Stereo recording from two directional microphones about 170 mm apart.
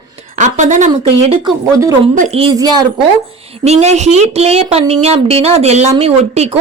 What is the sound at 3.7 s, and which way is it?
Speech, 40° right (ahead or behind).